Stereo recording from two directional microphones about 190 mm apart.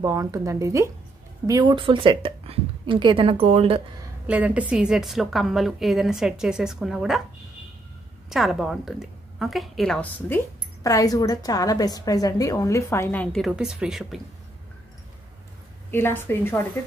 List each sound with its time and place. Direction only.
0.0 s a woman's voice: 20° right (ahead or behind)
4.3 s a woman's voice: 10° right (ahead or behind)
8.3 s a woman's voice: centre (ahead or behind)
15.9 s a woman's voice: 10° left (ahead or behind)